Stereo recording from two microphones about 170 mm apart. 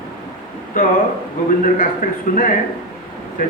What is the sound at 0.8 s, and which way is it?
A man's voice, 55° left (ahead or behind).